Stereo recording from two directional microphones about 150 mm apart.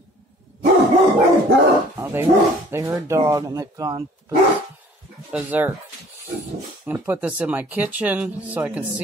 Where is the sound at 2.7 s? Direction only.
20° right (ahead or behind).